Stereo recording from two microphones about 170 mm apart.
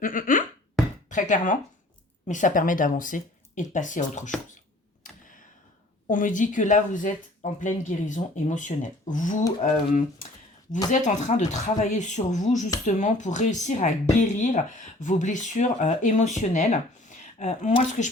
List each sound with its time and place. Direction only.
0.0 s a sound: 55° left (ahead or behind)
1.1 s speech: 50° left (ahead or behind)
6.1 s speech: 50° left (ahead or behind)
10.9 s speech: 45° left (ahead or behind)